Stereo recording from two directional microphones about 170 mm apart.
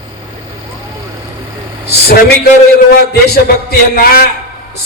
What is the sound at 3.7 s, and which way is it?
Speech, 60° left (ahead or behind).